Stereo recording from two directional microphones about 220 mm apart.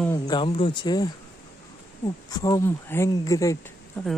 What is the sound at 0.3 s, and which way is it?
Speech, 20° left (ahead or behind).